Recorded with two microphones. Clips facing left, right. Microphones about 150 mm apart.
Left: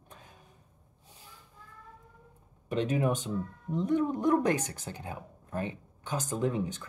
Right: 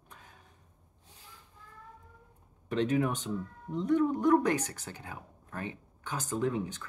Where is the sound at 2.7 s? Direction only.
15° left (ahead or behind).